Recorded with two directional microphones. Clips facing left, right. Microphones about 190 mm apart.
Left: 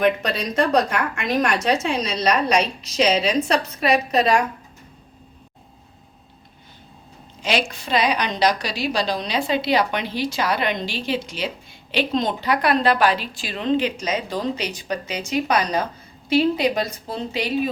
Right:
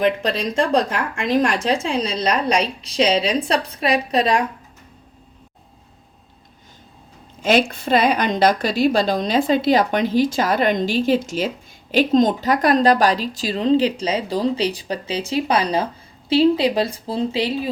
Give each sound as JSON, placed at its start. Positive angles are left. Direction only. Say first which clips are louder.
{"t": 0.0, "sound": "a woman's voice", "louder": "right 1 dB", "side_deg": -25}
{"t": 7.4, "sound": "a woman's voice", "louder": "right 6 dB", "side_deg": -50}